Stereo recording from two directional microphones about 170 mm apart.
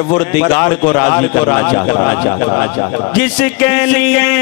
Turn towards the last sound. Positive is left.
turn(degrees=10)  # may be behind; listen again after turning